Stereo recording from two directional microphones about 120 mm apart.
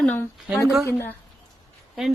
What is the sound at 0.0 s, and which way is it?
Speech, 15° left (ahead or behind).